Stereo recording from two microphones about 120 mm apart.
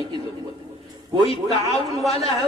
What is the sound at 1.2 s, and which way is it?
A man's voice, 55° left (ahead or behind).